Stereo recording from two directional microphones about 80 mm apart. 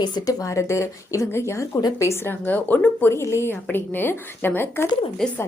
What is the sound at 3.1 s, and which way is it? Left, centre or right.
A woman's voice, left.